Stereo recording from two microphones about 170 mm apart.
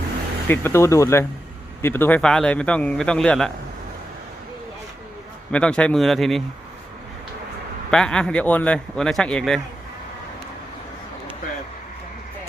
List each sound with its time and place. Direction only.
0.4 s a man's voice: 15° left (ahead or behind)
5.5 s speech: 5° left (ahead or behind)
7.9 s speech: 5° left (ahead or behind)